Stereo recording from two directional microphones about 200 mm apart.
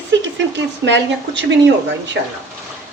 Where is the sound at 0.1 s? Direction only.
65° right (ahead or behind).